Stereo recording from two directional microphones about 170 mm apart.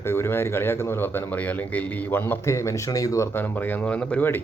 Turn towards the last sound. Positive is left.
turn(degrees=10)  # may be behind; listen again after turning